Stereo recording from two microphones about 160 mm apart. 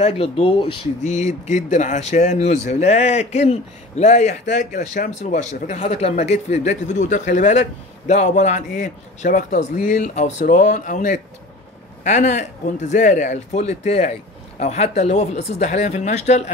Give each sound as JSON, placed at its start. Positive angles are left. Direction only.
{"t": 0.0, "sound": "speech", "side_deg": 40}
{"t": 1.4, "sound": "a man's voice", "side_deg": 50}